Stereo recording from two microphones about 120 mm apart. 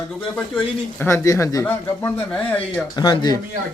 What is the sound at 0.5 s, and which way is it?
Speech, 20° left (ahead or behind).